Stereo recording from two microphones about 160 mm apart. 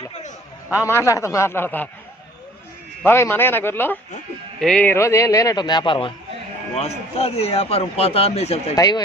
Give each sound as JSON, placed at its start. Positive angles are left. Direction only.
{"t": 0.8, "sound": "speech", "side_deg": 15}
{"t": 3.0, "sound": "speech", "side_deg": 15}
{"t": 8.7, "sound": "speech", "side_deg": 25}